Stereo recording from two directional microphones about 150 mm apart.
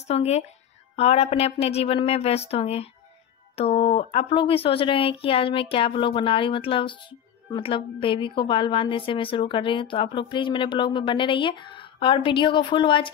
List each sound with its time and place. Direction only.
0.1 s speech: 45° left (ahead or behind)